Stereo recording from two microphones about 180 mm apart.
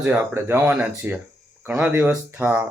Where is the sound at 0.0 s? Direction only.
5° right (ahead or behind).